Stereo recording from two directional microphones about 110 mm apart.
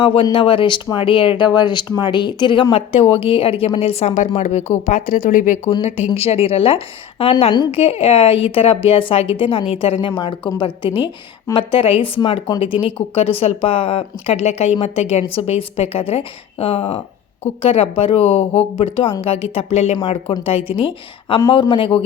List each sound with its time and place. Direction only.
0.0 s speech: 55° left (ahead or behind)
2.7 s a woman's voice: 65° left (ahead or behind); by 5.7 s 90° left
6.1 s speech: 65° left (ahead or behind)
21.5 s speech: 50° left (ahead or behind)